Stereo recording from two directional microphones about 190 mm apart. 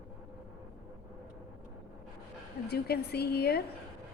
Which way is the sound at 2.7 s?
55° left (ahead or behind).